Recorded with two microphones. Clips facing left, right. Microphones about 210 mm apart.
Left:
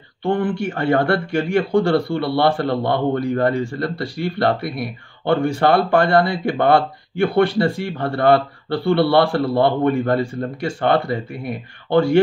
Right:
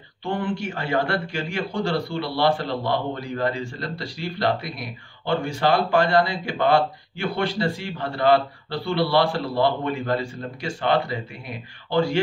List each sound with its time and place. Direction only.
0.2 s speech: 55° left (ahead or behind)